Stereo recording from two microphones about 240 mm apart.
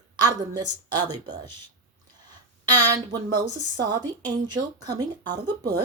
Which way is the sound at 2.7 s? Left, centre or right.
Centre.